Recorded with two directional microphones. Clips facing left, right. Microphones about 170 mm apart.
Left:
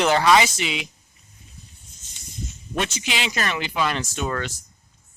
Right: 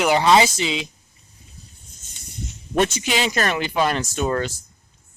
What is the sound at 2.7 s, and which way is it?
Speech, 45° right (ahead or behind).